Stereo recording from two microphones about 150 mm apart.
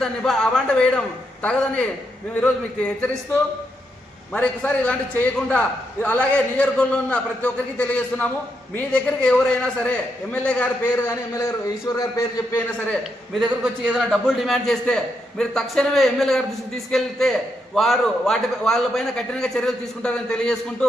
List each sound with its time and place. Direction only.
0.0 s a man's voice: 5° left (ahead or behind)
4.3 s a man's voice: 10° left (ahead or behind)
10.9 s a man's voice: 20° left (ahead or behind)
13.4 s a man's voice: centre (ahead or behind)